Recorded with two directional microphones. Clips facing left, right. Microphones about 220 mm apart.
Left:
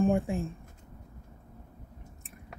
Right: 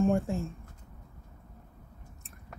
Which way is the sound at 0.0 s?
15° left (ahead or behind).